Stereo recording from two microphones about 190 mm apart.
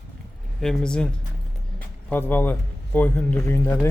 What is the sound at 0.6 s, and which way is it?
Speech, 5° left (ahead or behind).